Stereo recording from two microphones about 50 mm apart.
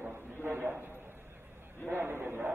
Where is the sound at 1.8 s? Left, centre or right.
Right.